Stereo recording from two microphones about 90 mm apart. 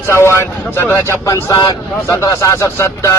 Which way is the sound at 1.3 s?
50° left (ahead or behind).